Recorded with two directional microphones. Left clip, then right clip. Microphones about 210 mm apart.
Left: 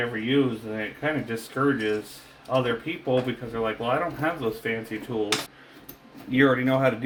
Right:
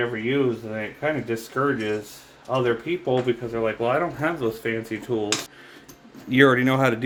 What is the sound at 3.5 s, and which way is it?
Speech, 40° right (ahead or behind).